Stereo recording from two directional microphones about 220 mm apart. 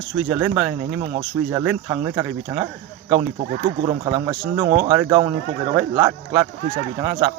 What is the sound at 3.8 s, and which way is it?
Speech, 20° right (ahead or behind).